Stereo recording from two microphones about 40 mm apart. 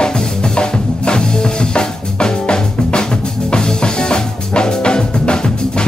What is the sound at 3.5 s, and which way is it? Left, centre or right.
Music, left.